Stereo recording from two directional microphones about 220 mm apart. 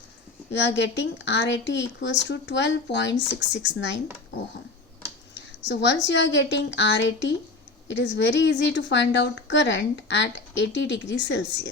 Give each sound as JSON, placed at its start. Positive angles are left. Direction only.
{"t": 0.5, "sound": "a woman's voice", "side_deg": 50}
{"t": 5.3, "sound": "a sound", "side_deg": 55}
{"t": 6.1, "sound": "a woman's voice", "side_deg": 55}